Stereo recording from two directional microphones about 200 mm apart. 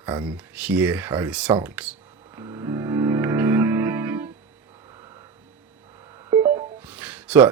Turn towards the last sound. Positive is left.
turn(degrees=-5)  # may be behind; listen again after turning